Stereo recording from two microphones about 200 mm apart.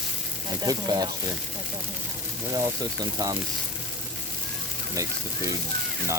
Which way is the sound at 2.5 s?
15° right (ahead or behind).